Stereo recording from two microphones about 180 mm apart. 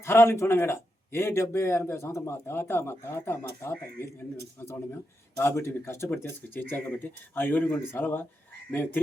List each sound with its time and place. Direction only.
0.0 s a man's voice: 15° left (ahead or behind)
4.4 s a man's voice: 15° left (ahead or behind)